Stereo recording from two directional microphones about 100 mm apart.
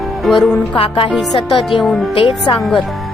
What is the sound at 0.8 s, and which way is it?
A woman's voice, 65° left (ahead or behind).